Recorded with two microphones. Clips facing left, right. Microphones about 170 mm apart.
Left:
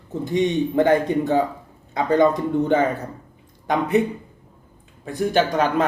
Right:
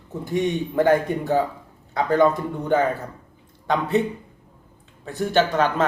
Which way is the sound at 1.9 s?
20° left (ahead or behind).